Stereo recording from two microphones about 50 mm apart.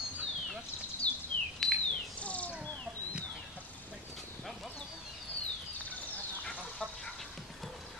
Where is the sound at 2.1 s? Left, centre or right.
Left.